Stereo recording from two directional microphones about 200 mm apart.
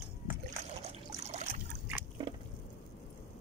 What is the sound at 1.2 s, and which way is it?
Boat, 35° right (ahead or behind).